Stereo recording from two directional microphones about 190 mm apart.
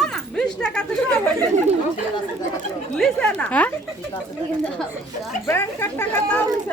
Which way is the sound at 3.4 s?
5° left (ahead or behind).